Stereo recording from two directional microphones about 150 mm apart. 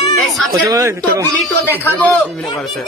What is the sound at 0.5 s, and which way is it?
Speech, 20° right (ahead or behind).